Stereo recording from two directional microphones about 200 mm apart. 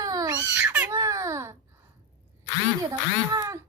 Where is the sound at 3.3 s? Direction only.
15° right (ahead or behind).